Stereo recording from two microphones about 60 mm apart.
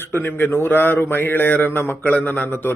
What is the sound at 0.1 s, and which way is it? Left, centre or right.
Speech, left.